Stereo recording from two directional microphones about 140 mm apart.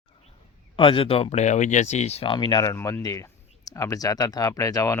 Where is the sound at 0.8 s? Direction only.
40° left (ahead or behind).